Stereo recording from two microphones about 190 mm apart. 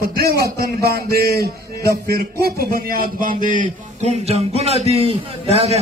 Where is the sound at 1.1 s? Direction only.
55° right (ahead or behind).